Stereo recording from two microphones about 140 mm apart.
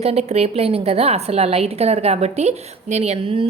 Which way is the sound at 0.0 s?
50° right (ahead or behind).